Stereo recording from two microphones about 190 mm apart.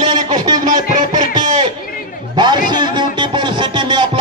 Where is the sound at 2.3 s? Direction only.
25° right (ahead or behind).